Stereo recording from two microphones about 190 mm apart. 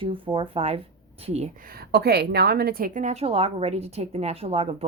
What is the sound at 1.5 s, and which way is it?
A woman's voice, 50° right (ahead or behind).